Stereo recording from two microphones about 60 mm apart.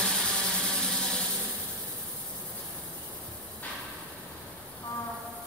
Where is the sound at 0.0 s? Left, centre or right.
Centre.